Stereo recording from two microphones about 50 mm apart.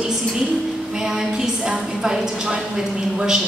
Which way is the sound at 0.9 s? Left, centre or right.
Centre.